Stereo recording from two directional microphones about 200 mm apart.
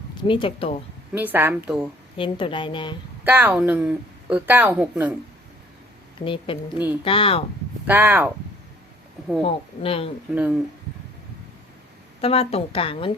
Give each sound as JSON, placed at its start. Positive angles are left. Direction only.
{"t": 0.3, "sound": "a woman's voice", "side_deg": 25}
{"t": 1.1, "sound": "speech", "side_deg": -10}
{"t": 2.1, "sound": "a woman's voice", "side_deg": 25}
{"t": 3.2, "sound": "speech", "side_deg": -10}
{"t": 6.1, "sound": "a woman's voice", "side_deg": 25}
{"t": 7.9, "sound": "speech", "side_deg": -10}
{"t": 9.4, "sound": "a woman's voice", "side_deg": 30}
{"t": 10.3, "sound": "speech", "side_deg": -5}
{"t": 12.2, "sound": "a woman's voice", "side_deg": 30}